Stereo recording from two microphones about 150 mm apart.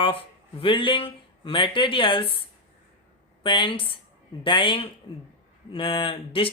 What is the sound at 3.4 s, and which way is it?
Speech, 35° left (ahead or behind).